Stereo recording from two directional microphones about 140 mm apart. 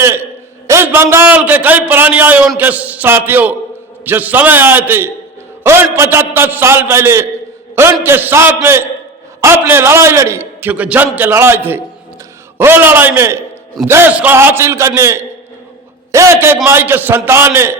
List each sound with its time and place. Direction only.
0.0 s a man's voice: 15° right (ahead or behind)